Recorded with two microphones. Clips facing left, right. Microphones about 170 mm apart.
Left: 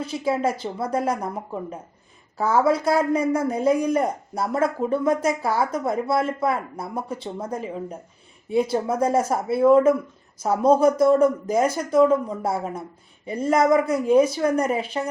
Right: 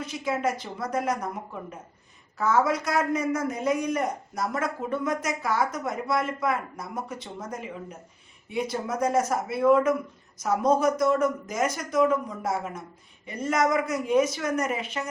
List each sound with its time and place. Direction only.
0.0 s speech: 30° left (ahead or behind)
2.4 s speech: 30° left (ahead or behind)